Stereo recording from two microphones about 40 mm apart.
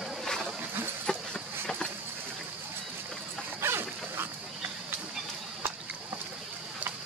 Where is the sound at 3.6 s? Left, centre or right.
Right.